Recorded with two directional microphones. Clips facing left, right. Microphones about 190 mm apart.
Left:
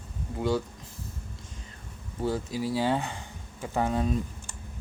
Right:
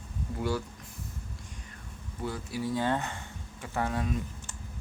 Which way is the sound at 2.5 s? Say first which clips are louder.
Left 2 dB; 90° left.